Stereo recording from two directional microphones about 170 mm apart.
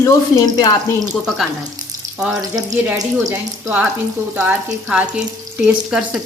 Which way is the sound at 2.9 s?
20° right (ahead or behind).